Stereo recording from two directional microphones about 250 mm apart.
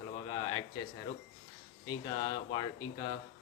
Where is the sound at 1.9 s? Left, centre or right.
Centre.